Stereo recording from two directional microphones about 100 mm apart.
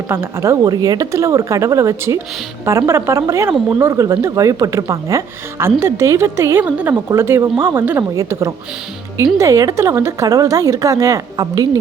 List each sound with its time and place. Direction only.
0.1 s a woman's voice: 25° right (ahead or behind)